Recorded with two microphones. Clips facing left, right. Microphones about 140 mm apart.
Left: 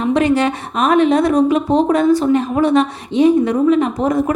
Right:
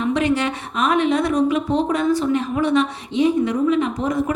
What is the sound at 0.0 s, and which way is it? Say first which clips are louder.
A woman's voice: left 5 dB; 40° left (ahead or behind).